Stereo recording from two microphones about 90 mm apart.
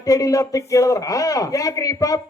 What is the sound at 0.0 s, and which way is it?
A child's voice, 40° left (ahead or behind).